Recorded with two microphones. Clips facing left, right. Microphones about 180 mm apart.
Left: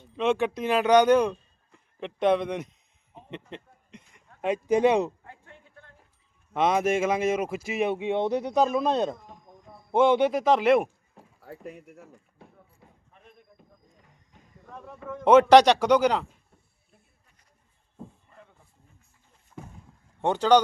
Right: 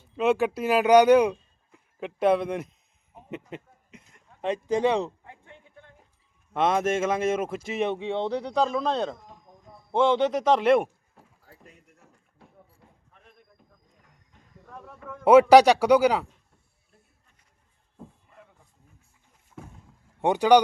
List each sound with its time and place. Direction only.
0.0 s speech: 5° right (ahead or behind)
3.2 s a sound: 5° right (ahead or behind)
4.4 s speech: 10° left (ahead or behind)
5.2 s a sound: 20° right (ahead or behind)
6.5 s speech: centre (ahead or behind)
8.0 s speech: 15° left (ahead or behind)
11.3 s speech: 70° left (ahead or behind)
14.7 s a man's voice: centre (ahead or behind)
19.6 s a sound: centre (ahead or behind)
20.2 s a man's voice: 15° right (ahead or behind)